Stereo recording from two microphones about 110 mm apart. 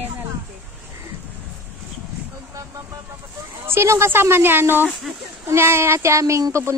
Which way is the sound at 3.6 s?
25° right (ahead or behind).